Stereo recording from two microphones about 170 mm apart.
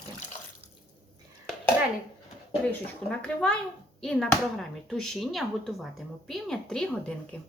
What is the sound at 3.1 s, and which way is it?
A woman's voice, 5° left (ahead or behind).